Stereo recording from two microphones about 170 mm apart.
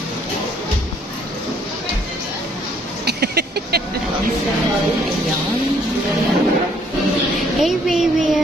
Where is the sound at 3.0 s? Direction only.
70° right (ahead or behind).